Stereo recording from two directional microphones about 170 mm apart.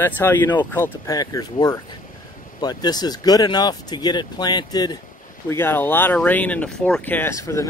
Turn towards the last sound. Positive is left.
turn(degrees=20)  # may be behind; listen again after turning